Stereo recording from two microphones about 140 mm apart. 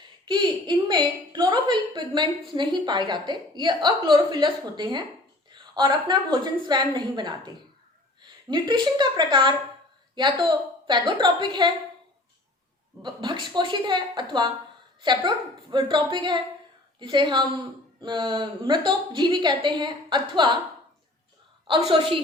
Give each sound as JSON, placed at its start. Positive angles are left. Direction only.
{"t": 0.0, "sound": "a woman's voice", "side_deg": -35}
{"t": 13.0, "sound": "a woman's voice", "side_deg": -35}
{"t": 21.7, "sound": "a woman's voice", "side_deg": -40}